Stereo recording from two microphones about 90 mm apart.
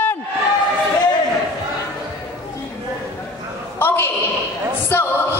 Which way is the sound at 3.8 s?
25° left (ahead or behind).